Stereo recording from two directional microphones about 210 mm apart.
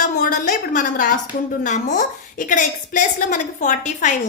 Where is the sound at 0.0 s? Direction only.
40° left (ahead or behind).